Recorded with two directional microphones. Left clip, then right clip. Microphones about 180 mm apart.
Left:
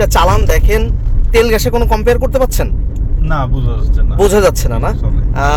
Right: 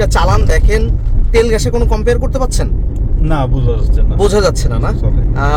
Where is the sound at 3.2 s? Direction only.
25° right (ahead or behind).